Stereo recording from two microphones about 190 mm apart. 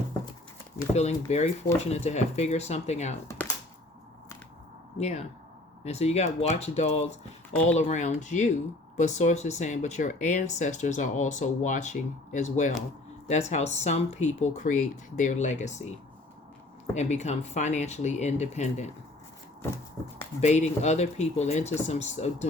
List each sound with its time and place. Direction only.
0.9 s speech: 35° left (ahead or behind)
3.2 s a sound: 15° left (ahead or behind)
4.9 s speech: 35° left (ahead or behind)
7.5 s speech: 10° left (ahead or behind)
7.8 s speech: 40° left (ahead or behind)
20.4 s speech: 35° left (ahead or behind)